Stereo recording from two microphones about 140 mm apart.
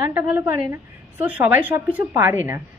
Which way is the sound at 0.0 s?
15° right (ahead or behind).